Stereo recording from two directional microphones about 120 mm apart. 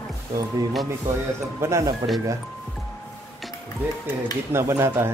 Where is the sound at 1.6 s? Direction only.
20° right (ahead or behind).